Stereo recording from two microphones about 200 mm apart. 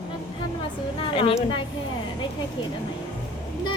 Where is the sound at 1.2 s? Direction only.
25° left (ahead or behind).